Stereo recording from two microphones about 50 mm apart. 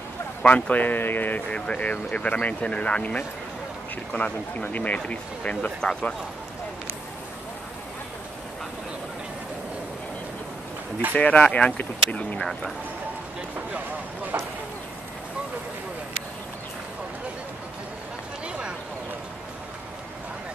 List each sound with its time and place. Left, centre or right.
0.4 s speech: left
1.5 s speech: left
11.1 s speech: left
14.3 s speech: right